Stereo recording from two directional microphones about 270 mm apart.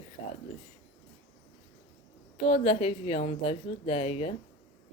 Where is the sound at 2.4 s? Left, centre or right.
Left.